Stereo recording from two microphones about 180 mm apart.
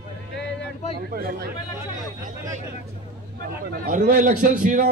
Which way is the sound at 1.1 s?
55° right (ahead or behind).